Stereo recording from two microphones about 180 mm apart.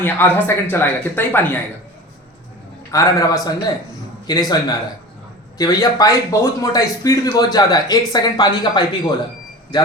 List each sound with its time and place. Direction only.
0.0 s speech: 10° left (ahead or behind)
2.9 s a man's voice: 20° left (ahead or behind)
5.5 s a man's voice: 20° left (ahead or behind)